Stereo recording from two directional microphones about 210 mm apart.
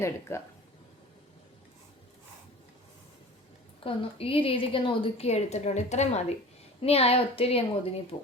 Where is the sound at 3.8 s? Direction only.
25° left (ahead or behind).